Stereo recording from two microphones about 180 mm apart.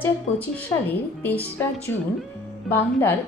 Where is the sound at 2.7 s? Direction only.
10° left (ahead or behind).